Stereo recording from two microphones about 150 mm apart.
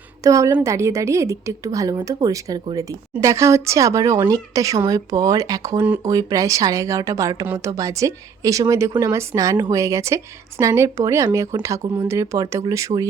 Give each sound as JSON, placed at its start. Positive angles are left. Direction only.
{"t": 0.2, "sound": "a woman's voice", "side_deg": -20}